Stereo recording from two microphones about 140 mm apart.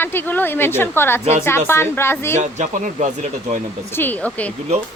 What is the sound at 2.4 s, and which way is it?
Speech, 55° right (ahead or behind).